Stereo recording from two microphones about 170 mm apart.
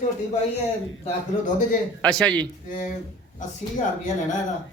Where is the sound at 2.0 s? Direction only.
5° left (ahead or behind).